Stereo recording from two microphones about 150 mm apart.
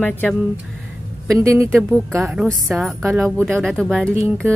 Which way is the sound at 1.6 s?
15° right (ahead or behind).